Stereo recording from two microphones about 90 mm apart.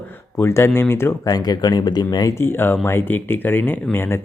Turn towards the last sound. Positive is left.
turn(degrees=25)  # may be behind; listen again after turning